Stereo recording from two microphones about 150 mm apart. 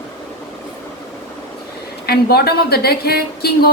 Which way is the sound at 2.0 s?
90° left.